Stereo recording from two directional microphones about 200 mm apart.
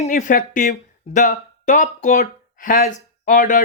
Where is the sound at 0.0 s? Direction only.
40° left (ahead or behind).